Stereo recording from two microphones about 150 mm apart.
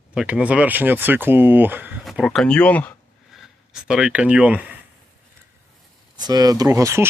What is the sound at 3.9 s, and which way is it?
Speech, 5° right (ahead or behind).